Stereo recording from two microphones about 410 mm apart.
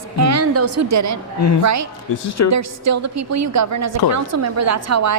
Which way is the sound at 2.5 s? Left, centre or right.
Right.